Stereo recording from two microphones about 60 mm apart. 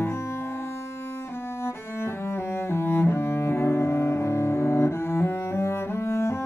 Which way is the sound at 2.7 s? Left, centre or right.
Left.